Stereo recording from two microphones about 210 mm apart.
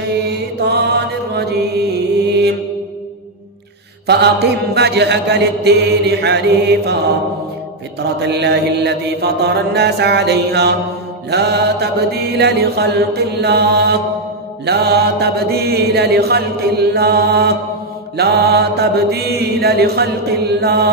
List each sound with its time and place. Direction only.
0.3 s mantra: 50° right (ahead or behind)
4.1 s mantra: 50° right (ahead or behind)
8.2 s mantra: 55° right (ahead or behind)